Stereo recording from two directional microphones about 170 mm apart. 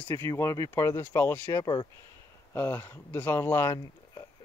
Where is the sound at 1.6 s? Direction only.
25° left (ahead or behind).